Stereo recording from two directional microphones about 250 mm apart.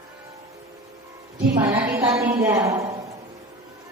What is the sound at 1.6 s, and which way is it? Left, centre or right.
A woman's voice, centre.